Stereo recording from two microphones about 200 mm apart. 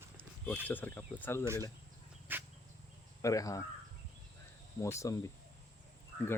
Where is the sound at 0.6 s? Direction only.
10° left (ahead or behind).